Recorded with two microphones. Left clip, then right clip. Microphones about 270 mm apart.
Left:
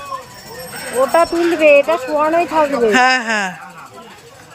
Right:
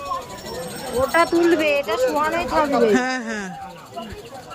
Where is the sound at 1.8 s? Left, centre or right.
Left.